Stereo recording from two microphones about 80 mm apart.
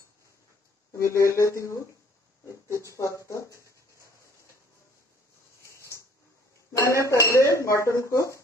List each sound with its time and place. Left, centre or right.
0.9 s speech: left
5.7 s a sound: left
6.8 s speech: left